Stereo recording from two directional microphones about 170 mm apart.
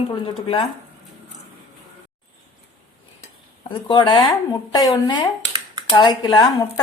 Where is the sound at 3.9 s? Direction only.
30° left (ahead or behind).